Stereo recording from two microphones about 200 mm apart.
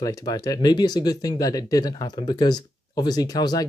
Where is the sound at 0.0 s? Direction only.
20° left (ahead or behind).